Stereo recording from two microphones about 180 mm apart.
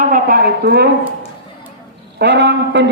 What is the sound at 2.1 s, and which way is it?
Speech, 75° right (ahead or behind).